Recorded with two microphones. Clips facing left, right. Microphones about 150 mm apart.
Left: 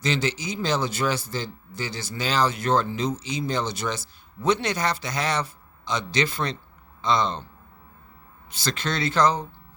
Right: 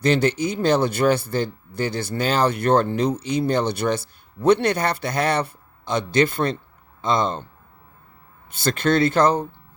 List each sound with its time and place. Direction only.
0.0 s speech: 55° right (ahead or behind)
8.4 s speech: 55° right (ahead or behind)